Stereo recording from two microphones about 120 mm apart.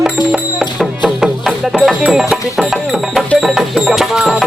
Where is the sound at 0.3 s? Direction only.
5° right (ahead or behind).